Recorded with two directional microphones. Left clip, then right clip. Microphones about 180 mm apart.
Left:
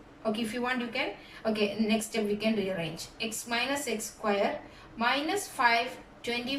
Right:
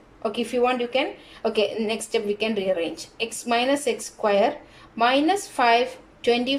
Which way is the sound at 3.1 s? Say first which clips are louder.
Right 8 dB; 65° right (ahead or behind).